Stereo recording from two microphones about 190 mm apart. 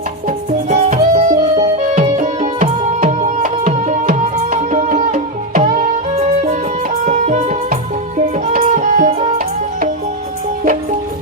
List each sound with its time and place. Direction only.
0.3 s music: 45° right (ahead or behind)
7.0 s music: 40° right (ahead or behind)